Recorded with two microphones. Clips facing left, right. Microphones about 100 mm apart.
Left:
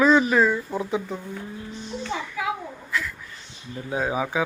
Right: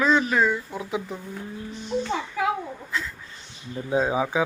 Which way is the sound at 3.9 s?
20° right (ahead or behind).